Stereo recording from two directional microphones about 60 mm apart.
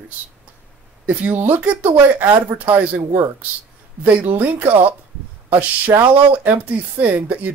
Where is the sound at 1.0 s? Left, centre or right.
Right.